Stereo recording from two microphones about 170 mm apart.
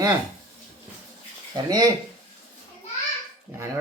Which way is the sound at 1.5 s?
25° right (ahead or behind).